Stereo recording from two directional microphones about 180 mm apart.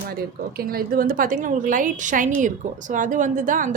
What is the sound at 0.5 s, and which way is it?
Speech, 55° right (ahead or behind).